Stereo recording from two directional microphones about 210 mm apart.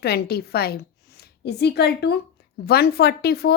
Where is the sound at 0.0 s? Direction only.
50° left (ahead or behind).